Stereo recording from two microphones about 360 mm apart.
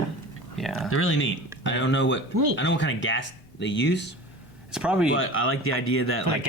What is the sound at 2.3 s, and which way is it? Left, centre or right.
Speech, right.